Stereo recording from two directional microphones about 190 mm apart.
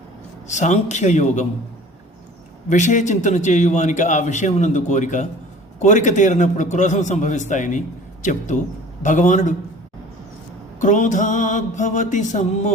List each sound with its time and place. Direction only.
0.4 s a man's voice: 40° left (ahead or behind)
2.6 s a man's voice: 40° left (ahead or behind)
10.8 s a man's voice: 40° left (ahead or behind)